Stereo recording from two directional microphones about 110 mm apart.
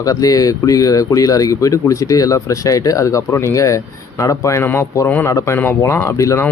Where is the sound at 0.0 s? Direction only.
35° left (ahead or behind).